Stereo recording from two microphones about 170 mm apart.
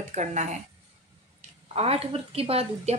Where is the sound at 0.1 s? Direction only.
45° right (ahead or behind).